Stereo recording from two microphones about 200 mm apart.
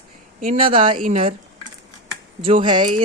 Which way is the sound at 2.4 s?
25° right (ahead or behind).